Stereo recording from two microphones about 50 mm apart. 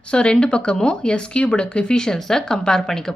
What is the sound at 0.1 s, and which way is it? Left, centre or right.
Speech, centre.